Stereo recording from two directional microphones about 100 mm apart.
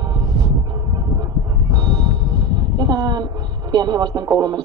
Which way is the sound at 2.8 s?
45° right (ahead or behind).